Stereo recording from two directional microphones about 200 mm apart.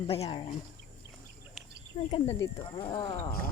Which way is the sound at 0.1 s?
25° left (ahead or behind).